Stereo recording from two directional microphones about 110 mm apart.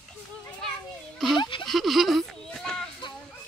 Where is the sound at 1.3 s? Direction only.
45° left (ahead or behind).